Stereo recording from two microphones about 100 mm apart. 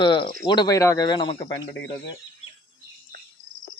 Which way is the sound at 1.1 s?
50° left (ahead or behind).